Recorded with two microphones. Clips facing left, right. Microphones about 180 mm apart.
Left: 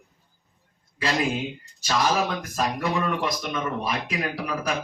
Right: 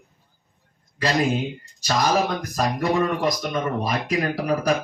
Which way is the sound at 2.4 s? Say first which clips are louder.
Right 3 dB; 40° right (ahead or behind).